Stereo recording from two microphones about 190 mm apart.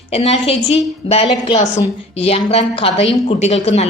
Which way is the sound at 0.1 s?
30° left (ahead or behind).